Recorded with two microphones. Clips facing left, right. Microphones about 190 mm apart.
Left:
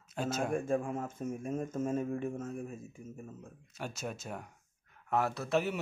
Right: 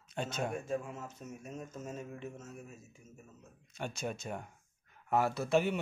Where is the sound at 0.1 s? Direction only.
5° left (ahead or behind).